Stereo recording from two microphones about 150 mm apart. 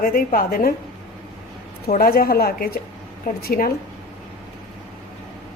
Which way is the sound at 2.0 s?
80° left.